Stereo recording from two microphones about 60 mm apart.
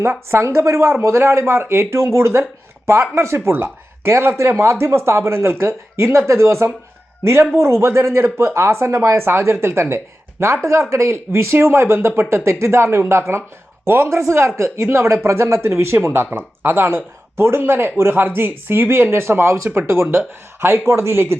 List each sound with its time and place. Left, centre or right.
0.0 s speech: right
11.3 s a man's voice: right